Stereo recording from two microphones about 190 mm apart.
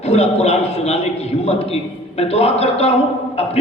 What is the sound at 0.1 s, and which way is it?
A man's voice, 35° left (ahead or behind).